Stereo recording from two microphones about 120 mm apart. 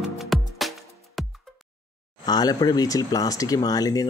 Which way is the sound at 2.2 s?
35° left (ahead or behind).